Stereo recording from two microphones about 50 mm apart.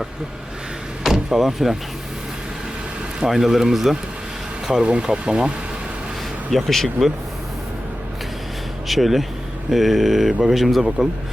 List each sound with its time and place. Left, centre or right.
1.0 s vehicle: centre
3.2 s speech: centre
4.7 s speech: centre
6.5 s speech: centre
8.9 s speech: centre